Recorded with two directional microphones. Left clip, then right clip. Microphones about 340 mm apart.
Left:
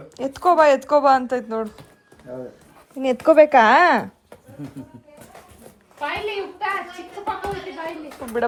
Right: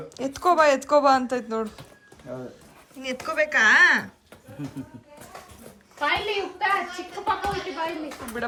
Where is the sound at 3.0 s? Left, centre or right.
Centre.